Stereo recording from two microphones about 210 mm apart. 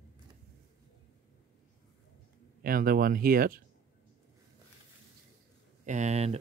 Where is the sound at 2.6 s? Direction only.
45° right (ahead or behind).